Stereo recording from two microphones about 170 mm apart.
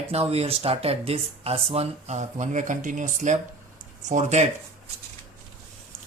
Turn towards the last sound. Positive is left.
turn(degrees=-45)  # may be behind; listen again after turning